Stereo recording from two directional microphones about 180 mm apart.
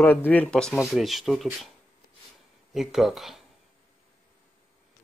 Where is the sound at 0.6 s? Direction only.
5° right (ahead or behind).